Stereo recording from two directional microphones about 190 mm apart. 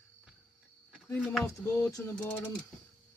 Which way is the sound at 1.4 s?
15° left (ahead or behind).